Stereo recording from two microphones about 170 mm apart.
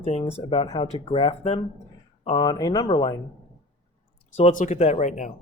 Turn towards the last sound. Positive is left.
turn(degrees=45)  # may be behind; listen again after turning